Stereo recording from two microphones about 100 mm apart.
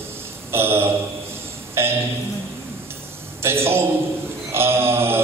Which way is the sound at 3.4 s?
25° right (ahead or behind).